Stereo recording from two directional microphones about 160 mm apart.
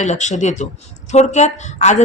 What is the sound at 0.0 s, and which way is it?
A woman's voice, 50° left (ahead or behind).